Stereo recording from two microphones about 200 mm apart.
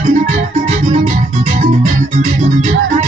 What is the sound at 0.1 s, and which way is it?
Music, 40° right (ahead or behind).